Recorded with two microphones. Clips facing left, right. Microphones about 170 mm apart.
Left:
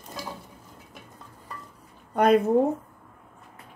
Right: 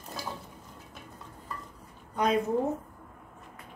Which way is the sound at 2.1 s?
60° left (ahead or behind).